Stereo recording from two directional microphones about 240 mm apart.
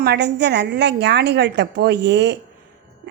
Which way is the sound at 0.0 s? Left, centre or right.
Right.